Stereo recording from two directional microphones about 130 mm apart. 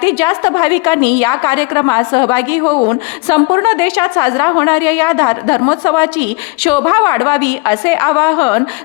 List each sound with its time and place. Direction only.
0.0 s a woman's voice: 30° left (ahead or behind)